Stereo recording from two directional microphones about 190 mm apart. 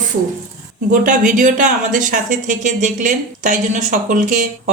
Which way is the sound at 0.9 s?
40° right (ahead or behind).